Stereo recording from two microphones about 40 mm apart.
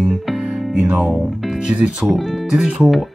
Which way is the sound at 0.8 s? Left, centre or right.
Right.